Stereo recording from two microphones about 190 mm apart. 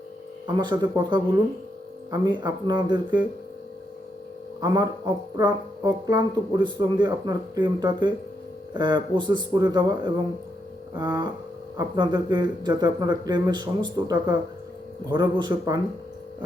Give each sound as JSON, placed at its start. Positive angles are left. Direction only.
{"t": 0.4, "sound": "speech", "side_deg": -25}
{"t": 4.6, "sound": "speech", "side_deg": -20}